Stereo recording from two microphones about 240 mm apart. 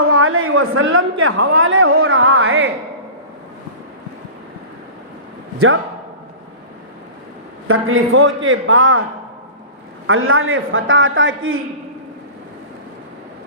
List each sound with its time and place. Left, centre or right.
0.1 s a sound: right
1.2 s a woman's voice: right
7.7 s a woman's voice: right
10.1 s a woman's voice: right